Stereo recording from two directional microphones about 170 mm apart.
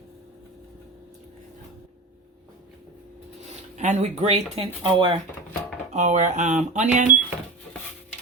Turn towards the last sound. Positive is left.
turn(degrees=-45)  # may be behind; listen again after turning